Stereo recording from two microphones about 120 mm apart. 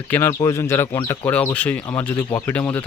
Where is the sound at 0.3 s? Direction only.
30° left (ahead or behind).